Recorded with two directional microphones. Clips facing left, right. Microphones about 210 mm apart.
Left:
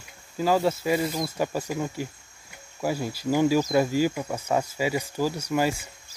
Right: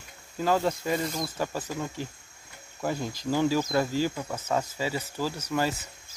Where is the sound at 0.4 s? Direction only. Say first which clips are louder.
Left 3 dB; 5° left (ahead or behind).